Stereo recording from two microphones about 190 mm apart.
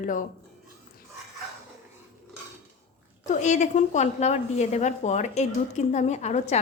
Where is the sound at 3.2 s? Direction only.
40° left (ahead or behind).